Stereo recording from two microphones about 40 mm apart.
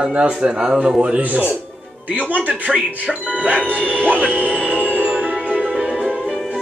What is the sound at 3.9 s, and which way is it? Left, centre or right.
Speech, right.